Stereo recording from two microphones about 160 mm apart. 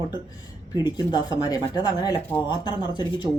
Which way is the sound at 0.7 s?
25° left (ahead or behind).